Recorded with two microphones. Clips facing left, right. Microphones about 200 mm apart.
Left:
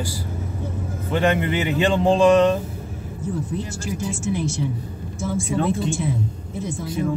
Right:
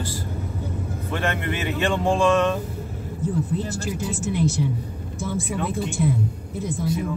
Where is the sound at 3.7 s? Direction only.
60° right (ahead or behind).